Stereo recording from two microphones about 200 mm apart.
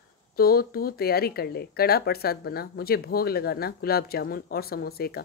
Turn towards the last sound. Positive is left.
turn(degrees=50)  # may be behind; listen again after turning